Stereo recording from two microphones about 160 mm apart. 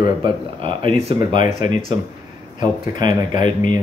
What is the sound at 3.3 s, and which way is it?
Speech, 50° left (ahead or behind).